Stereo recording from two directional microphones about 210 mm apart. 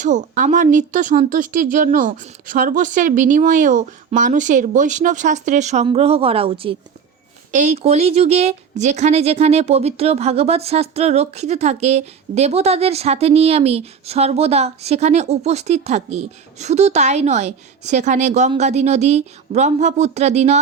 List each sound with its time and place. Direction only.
0.0 s speech: 35° right (ahead or behind)